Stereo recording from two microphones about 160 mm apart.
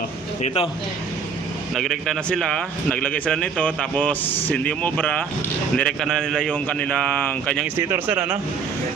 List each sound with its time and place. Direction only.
0.4 s speech: 40° left (ahead or behind)
1.7 s a man's voice: centre (ahead or behind)
7.8 s speech: 15° right (ahead or behind)